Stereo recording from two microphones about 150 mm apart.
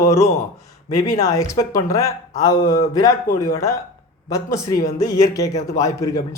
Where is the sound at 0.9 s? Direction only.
25° left (ahead or behind).